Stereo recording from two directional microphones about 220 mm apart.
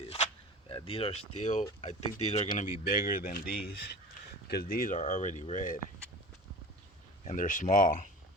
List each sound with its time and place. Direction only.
0.7 s speech: 25° left (ahead or behind)
7.3 s speech: 35° left (ahead or behind)